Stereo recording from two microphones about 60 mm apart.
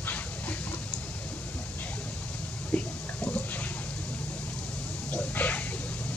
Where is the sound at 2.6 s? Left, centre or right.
Left.